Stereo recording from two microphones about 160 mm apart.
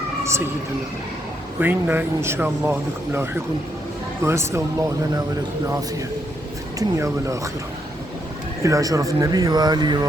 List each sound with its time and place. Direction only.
1.5 s speech: 10° right (ahead or behind)
6.7 s speech: 20° right (ahead or behind)
8.6 s speech: 20° right (ahead or behind)